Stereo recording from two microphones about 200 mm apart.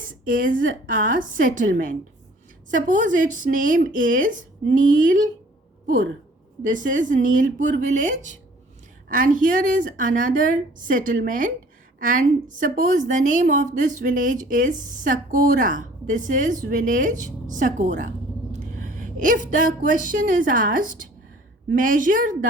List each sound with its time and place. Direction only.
0.0 s a woman's voice: 45° right (ahead or behind)
6.6 s a woman's voice: 40° right (ahead or behind)